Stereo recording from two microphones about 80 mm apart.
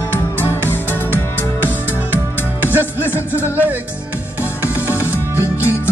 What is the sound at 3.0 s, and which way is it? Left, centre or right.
Music, left.